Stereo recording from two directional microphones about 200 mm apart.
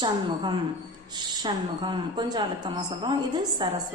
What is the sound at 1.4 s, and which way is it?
A woman's voice, 20° right (ahead or behind).